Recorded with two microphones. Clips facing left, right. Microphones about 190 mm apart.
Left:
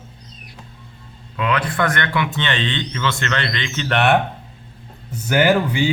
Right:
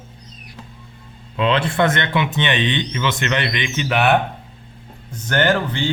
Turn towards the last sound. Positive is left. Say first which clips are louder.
# left 2 dB
turn(degrees=10)  # may be behind; listen again after turning